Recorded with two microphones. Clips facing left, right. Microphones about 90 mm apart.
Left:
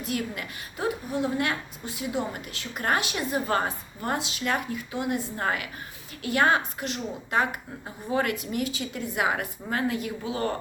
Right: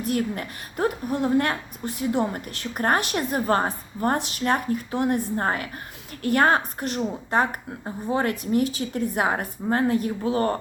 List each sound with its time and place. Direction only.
0.1 s a woman's voice: 45° right (ahead or behind)